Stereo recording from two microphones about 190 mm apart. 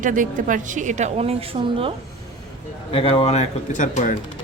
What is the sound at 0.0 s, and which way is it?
A woman's voice, 45° right (ahead or behind).